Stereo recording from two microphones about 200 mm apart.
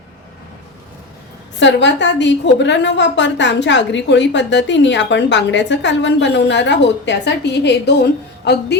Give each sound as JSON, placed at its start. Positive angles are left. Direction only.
{"t": 1.5, "sound": "a woman's voice", "side_deg": 65}